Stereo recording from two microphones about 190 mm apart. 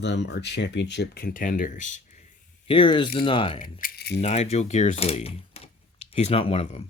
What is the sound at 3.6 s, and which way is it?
Speech, 45° left (ahead or behind).